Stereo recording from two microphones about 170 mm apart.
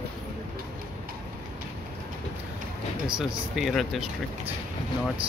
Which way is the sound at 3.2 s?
Centre (ahead or behind).